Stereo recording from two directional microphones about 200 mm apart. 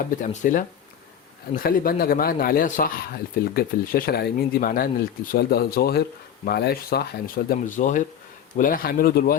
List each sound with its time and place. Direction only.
0.0 s speech: 40° left (ahead or behind)